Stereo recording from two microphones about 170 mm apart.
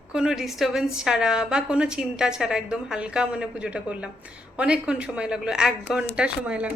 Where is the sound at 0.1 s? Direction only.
5° right (ahead or behind).